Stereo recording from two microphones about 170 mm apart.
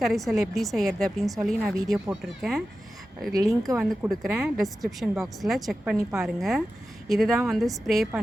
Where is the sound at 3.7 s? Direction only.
20° right (ahead or behind).